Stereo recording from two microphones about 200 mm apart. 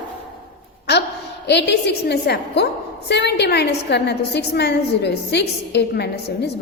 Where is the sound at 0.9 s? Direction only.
55° left (ahead or behind).